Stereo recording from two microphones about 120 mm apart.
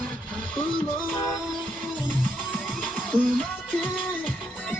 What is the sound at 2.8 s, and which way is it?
Music, 10° left (ahead or behind).